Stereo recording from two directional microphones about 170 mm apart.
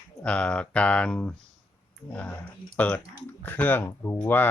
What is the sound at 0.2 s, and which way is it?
Speech, 5° left (ahead or behind).